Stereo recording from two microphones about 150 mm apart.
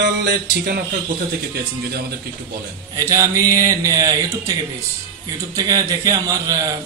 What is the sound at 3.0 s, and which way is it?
A man's voice, 20° right (ahead or behind).